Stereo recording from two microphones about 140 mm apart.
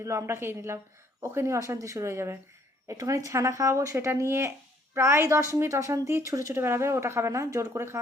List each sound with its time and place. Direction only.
0.0 s a woman's voice: 20° right (ahead or behind)